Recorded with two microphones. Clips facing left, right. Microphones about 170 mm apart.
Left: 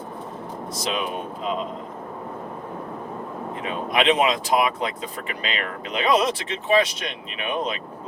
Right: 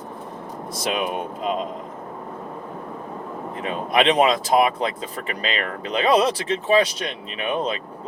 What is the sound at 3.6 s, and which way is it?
Speech, 35° right (ahead or behind).